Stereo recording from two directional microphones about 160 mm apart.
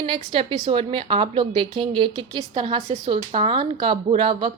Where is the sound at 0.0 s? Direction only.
35° right (ahead or behind).